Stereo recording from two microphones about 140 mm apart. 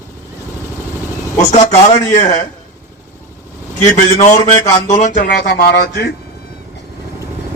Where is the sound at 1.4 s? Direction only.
50° left (ahead or behind).